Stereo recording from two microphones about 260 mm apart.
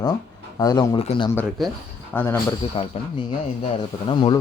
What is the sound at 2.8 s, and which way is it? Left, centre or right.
Speech, left.